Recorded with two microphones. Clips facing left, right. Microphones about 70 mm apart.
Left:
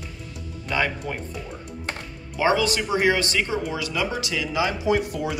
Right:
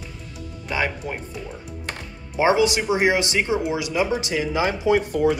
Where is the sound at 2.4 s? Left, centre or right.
Centre.